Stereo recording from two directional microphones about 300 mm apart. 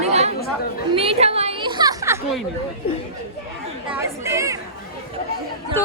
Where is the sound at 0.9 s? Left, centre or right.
Centre.